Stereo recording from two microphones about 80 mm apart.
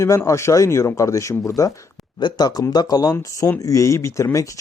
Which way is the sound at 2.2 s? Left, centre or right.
Left.